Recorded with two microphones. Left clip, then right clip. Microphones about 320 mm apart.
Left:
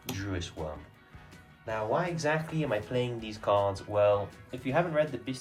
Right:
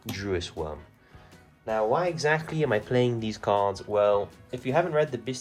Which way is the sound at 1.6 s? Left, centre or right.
Centre.